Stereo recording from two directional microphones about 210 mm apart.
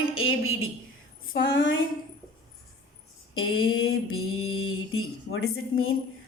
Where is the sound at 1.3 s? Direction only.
60° left (ahead or behind).